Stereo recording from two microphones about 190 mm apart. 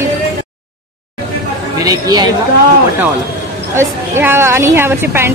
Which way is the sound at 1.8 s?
20° right (ahead or behind).